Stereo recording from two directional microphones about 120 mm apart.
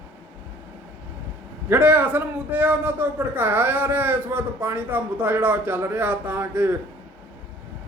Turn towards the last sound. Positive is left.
turn(degrees=-20)  # may be behind; listen again after turning